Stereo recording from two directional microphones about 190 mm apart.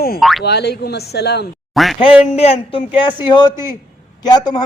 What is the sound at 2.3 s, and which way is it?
A man's voice, 30° left (ahead or behind).